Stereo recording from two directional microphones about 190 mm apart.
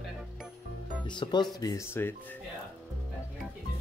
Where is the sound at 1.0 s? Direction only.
25° left (ahead or behind).